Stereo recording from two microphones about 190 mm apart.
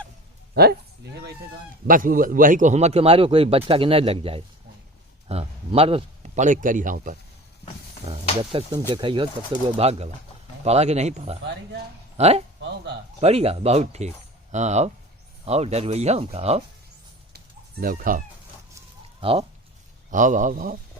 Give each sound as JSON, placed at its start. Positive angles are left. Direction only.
{"t": 0.5, "sound": "speech", "side_deg": -55}
{"t": 1.9, "sound": "speech", "side_deg": -45}
{"t": 8.1, "sound": "speech", "side_deg": -25}
{"t": 17.3, "sound": "chicken", "side_deg": -50}
{"t": 19.2, "sound": "speech", "side_deg": -30}
{"t": 20.1, "sound": "a man's voice", "side_deg": -40}